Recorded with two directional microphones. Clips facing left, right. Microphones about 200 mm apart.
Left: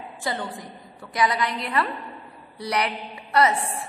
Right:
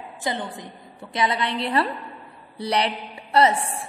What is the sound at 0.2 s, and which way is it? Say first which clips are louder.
A woman's voice: right 1 dB; 20° right (ahead or behind).